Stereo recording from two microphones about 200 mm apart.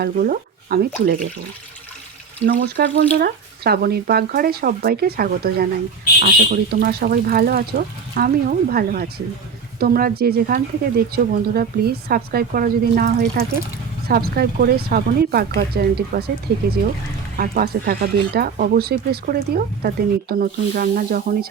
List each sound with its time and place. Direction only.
0.0 s speech: 50° right (ahead or behind)
2.5 s speech: 45° right (ahead or behind)
17.3 s speech: 45° right (ahead or behind)